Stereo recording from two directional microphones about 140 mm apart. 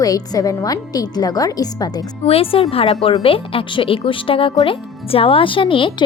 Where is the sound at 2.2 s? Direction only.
45° left (ahead or behind).